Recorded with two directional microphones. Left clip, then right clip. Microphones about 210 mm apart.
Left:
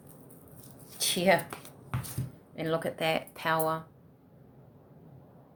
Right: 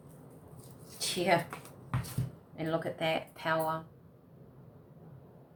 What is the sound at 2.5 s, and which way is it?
A woman's voice, 55° left (ahead or behind).